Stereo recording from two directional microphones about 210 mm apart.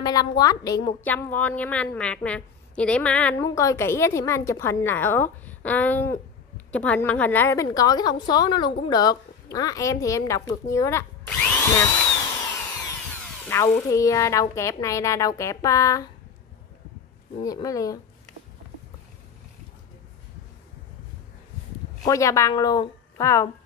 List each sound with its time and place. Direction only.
0.0 s a woman's voice: 15° left (ahead or behind)
12.4 s tools: 15° left (ahead or behind)
13.5 s a woman's voice: 15° left (ahead or behind)
17.4 s a woman's voice: 15° left (ahead or behind)
22.0 s a woman's voice: 15° left (ahead or behind)